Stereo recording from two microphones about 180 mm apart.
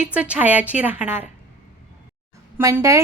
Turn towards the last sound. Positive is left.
turn(degrees=-15)  # may be behind; listen again after turning